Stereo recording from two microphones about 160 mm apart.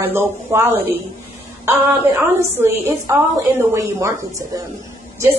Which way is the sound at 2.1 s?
15° right (ahead or behind).